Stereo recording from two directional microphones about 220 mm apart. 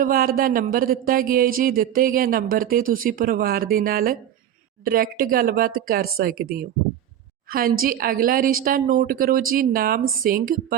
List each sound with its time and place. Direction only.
0.0 s speech: 40° right (ahead or behind)